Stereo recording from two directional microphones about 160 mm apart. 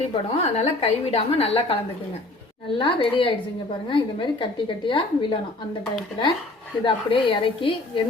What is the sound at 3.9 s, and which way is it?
A woman's voice, 30° left (ahead or behind).